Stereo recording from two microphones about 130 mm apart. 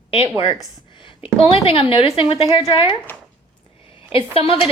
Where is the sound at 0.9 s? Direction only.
40° left (ahead or behind).